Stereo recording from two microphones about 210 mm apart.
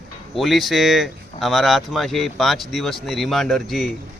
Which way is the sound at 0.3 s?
Centre (ahead or behind).